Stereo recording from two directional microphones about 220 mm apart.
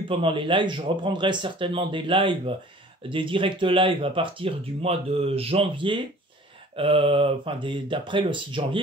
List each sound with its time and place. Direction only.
0.1 s speech: 25° right (ahead or behind)